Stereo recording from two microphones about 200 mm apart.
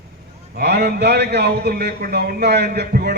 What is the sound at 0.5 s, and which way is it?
A man's voice, 55° right (ahead or behind).